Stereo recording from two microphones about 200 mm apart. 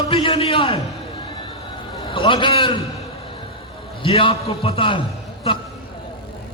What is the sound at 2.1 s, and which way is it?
Speech, 25° left (ahead or behind).